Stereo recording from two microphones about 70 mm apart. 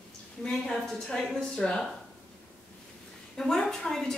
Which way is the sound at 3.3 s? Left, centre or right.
Centre.